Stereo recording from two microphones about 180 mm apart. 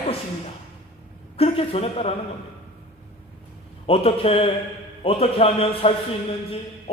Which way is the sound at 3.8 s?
35° left (ahead or behind).